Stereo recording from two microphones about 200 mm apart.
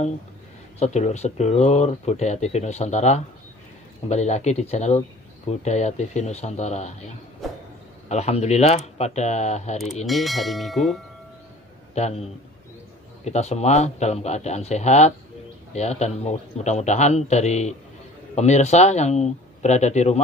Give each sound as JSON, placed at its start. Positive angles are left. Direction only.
{"t": 0.7, "sound": "speech", "side_deg": 35}
{"t": 10.0, "sound": "church bell", "side_deg": 0}
{"t": 11.9, "sound": "a man's voice", "side_deg": 30}